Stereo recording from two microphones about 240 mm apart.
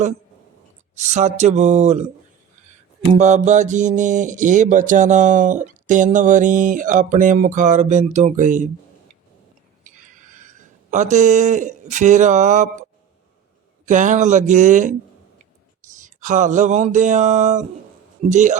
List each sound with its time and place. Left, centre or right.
0.9 s speech: right
3.1 s speech: right
9.8 s a sound: right
13.8 s speech: right
16.0 s a man's voice: right